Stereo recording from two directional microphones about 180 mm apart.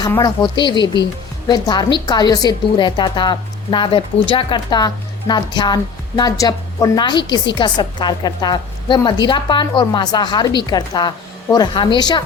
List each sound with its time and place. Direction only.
0.2 s a woman's voice: 25° left (ahead or behind)